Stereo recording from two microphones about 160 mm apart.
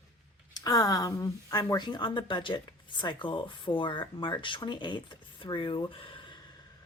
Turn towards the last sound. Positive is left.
turn(degrees=30)  # may be behind; listen again after turning